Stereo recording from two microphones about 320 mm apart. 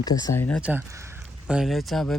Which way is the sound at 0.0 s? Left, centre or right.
Centre.